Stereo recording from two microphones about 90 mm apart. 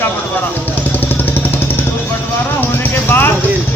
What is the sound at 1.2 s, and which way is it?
Jackhammer, 25° left (ahead or behind).